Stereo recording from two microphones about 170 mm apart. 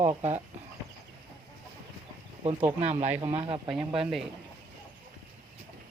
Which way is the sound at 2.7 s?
40° right (ahead or behind).